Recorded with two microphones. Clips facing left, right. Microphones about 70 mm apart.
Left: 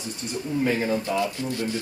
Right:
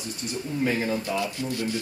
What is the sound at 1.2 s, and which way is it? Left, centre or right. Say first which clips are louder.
Speech: left 2 dB; left.